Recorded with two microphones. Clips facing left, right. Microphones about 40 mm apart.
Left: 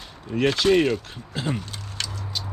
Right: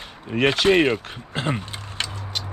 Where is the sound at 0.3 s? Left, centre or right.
Right.